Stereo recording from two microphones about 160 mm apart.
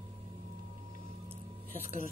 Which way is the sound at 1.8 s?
55° left (ahead or behind).